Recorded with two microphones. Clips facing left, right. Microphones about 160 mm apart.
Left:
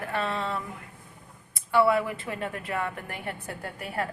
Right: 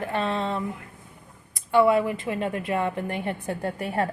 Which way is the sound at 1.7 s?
20° right (ahead or behind).